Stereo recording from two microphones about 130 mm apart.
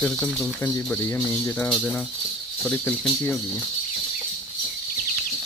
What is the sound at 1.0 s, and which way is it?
Speech, 20° left (ahead or behind).